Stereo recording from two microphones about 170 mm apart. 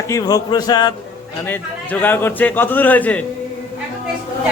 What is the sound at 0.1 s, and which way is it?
Speech, 20° left (ahead or behind).